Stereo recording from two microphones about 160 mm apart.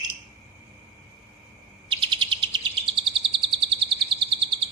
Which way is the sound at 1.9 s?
30° right (ahead or behind).